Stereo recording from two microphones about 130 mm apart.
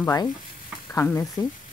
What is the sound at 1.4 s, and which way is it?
Speech, 30° left (ahead or behind).